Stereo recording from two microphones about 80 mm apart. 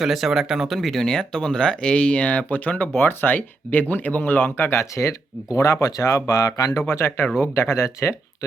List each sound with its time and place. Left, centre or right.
0.0 s speech: centre; by 6.8 s left
6.8 s speech: left